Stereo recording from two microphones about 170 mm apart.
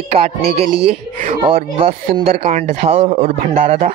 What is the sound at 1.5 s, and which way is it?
A man's voice, 35° right (ahead or behind).